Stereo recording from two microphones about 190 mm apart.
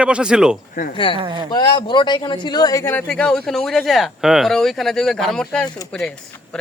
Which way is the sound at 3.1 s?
5° left (ahead or behind).